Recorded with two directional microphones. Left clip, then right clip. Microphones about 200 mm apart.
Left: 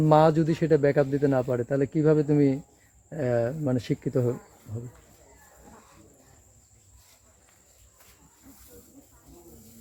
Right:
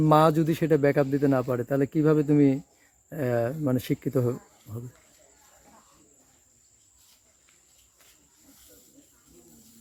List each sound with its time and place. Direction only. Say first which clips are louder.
0.0 s speech: even; 50° right (ahead or behind)